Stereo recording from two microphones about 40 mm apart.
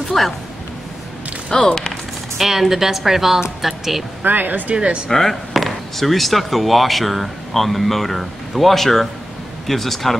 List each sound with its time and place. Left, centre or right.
0.2 s speech: centre
1.6 s speech: left
2.3 s a woman's voice: centre
4.2 s speech: right
4.7 s speech: right
5.1 s speech: centre